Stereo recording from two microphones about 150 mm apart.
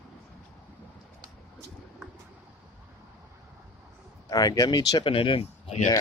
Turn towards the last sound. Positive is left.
turn(degrees=40)  # may be behind; listen again after turning